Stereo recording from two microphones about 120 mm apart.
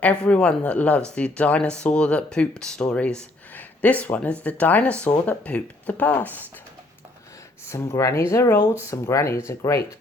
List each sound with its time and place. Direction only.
0.0 s speech: 10° left (ahead or behind)
7.7 s speech: 25° left (ahead or behind)